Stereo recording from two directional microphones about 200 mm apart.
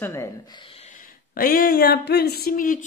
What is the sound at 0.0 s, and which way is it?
Speech, 15° left (ahead or behind).